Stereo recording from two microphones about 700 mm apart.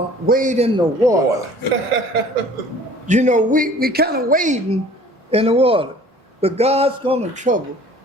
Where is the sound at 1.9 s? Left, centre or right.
Right.